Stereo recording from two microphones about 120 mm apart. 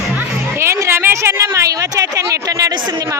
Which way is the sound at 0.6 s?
20° right (ahead or behind).